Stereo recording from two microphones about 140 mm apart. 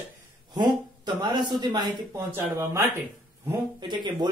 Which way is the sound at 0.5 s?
30° right (ahead or behind).